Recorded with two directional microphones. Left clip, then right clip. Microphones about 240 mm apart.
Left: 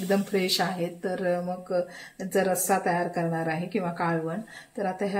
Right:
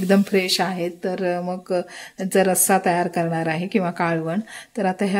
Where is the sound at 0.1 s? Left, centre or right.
Right.